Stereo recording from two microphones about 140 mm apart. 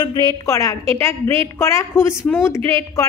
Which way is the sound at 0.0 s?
30° left (ahead or behind).